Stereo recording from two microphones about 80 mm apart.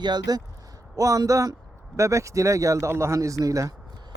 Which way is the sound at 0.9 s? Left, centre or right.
Right.